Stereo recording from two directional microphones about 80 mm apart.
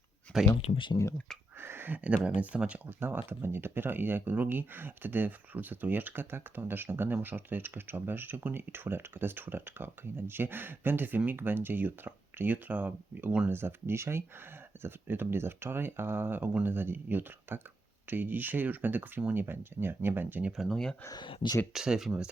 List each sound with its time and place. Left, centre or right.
0.3 s speech: centre
1.5 s speech: right
13.5 s speech: right
20.7 s speech: centre
21.2 s speech: left
21.7 s speech: centre